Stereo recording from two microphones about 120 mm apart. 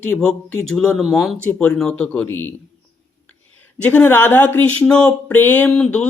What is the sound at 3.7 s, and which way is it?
Speech, 15° left (ahead or behind).